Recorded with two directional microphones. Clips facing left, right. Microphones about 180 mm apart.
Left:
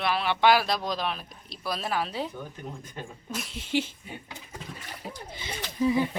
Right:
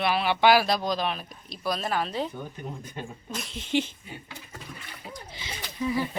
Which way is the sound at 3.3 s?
5° left (ahead or behind).